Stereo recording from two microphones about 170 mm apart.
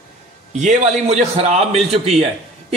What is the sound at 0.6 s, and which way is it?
A man's voice, 45° right (ahead or behind).